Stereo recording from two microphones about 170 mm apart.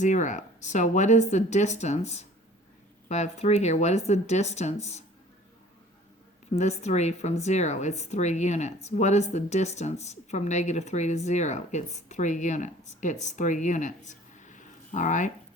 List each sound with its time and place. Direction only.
0.0 s speech: 45° left (ahead or behind)
6.5 s speech: 40° left (ahead or behind)